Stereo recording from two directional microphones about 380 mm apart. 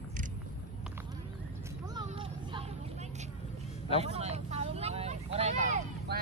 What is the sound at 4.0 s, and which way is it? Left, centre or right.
Vehicle, centre.